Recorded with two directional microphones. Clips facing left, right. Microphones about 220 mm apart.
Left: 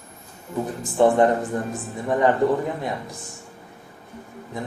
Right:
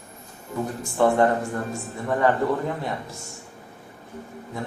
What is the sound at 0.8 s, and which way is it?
Speech, 20° left (ahead or behind).